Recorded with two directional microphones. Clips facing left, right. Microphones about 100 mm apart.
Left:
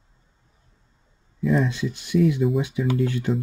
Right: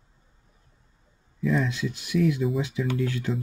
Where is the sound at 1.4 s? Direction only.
5° left (ahead or behind).